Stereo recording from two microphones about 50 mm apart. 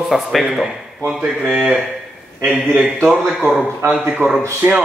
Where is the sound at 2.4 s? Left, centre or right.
Right.